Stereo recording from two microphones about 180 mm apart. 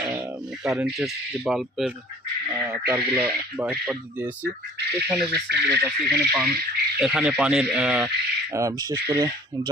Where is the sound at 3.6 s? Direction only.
5° right (ahead or behind).